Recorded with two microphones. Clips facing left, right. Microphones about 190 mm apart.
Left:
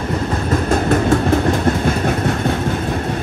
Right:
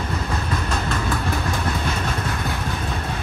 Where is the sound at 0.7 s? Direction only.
45° left (ahead or behind).